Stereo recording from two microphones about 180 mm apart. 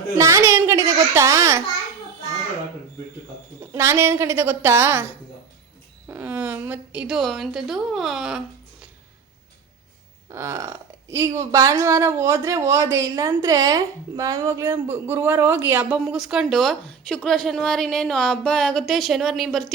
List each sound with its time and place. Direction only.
0.2 s a child's voice: 15° right (ahead or behind)
3.6 s a woman's voice: 15° right (ahead or behind)
10.3 s speech: 15° right (ahead or behind); by 19.7 s centre (ahead or behind)